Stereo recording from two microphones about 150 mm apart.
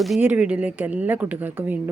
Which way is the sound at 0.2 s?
10° right (ahead or behind).